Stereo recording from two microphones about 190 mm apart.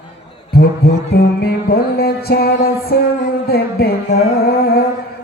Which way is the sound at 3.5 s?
55° left (ahead or behind).